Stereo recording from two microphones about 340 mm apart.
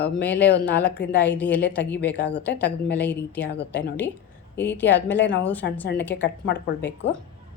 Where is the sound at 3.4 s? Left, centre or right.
Left.